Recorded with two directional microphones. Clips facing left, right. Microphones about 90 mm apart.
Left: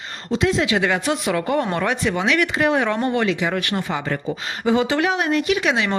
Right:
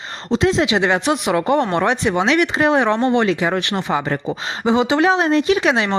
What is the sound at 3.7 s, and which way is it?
Speech, 20° right (ahead or behind).